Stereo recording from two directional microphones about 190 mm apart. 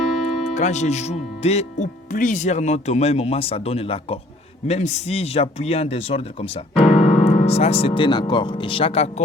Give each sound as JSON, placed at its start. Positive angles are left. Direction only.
{"t": 0.5, "sound": "speech", "side_deg": 40}